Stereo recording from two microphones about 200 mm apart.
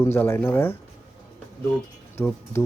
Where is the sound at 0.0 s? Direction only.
10° left (ahead or behind).